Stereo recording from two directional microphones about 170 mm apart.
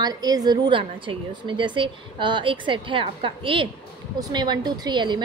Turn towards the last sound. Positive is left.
turn(degrees=-25)  # may be behind; listen again after turning